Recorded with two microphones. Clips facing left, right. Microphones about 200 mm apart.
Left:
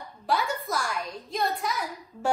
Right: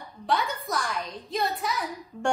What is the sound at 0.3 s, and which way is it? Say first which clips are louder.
A woman's voice: even; centre (ahead or behind).